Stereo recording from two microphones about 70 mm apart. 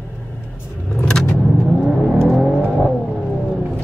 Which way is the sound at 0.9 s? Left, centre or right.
Centre.